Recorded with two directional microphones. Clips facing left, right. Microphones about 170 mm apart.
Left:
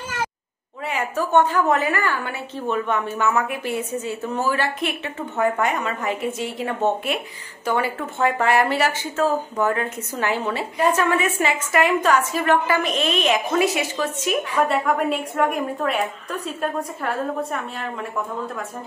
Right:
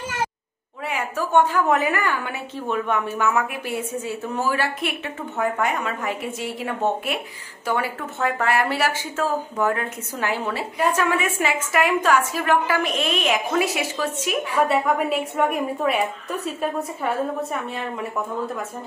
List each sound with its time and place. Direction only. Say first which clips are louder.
0.8 s a woman's voice: left 2 dB; 5° right (ahead or behind)